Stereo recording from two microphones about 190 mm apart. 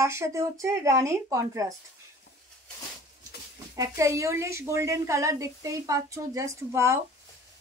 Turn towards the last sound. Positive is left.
turn(degrees=-15)  # may be behind; listen again after turning